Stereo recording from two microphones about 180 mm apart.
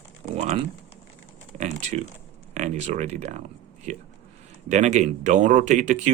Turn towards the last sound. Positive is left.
turn(degrees=-40)  # may be behind; listen again after turning